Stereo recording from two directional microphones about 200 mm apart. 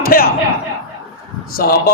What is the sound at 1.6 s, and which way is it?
Speech, 50° left (ahead or behind).